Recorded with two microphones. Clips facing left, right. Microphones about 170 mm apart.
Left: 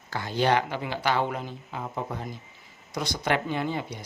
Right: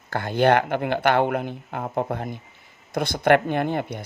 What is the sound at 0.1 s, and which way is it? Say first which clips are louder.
Speech: right 5 dB; 55° right (ahead or behind).